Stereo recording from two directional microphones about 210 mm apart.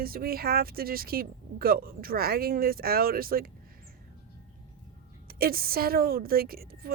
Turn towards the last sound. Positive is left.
turn(degrees=-45)  # may be behind; listen again after turning